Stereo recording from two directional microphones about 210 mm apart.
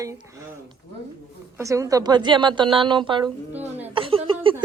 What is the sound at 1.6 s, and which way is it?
A woman's voice, 15° right (ahead or behind).